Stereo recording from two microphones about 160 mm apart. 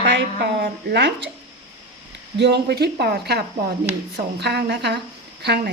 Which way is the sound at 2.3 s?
90° right.